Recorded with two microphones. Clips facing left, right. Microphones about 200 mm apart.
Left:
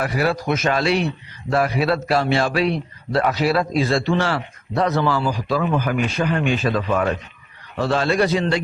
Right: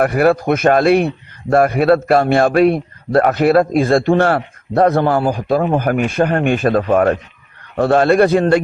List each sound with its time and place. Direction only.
0.0 s a man's voice: 55° right (ahead or behind)